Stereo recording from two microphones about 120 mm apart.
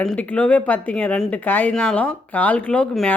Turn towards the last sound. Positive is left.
turn(degrees=10)  # may be behind; listen again after turning